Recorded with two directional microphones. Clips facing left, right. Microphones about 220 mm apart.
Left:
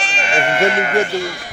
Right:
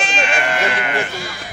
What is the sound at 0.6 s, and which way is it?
Speech, 45° left (ahead or behind).